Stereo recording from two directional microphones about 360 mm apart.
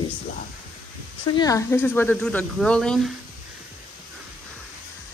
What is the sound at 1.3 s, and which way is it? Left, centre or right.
Speech, centre.